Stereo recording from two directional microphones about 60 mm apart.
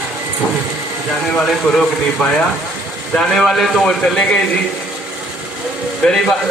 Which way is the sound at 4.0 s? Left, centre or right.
Centre.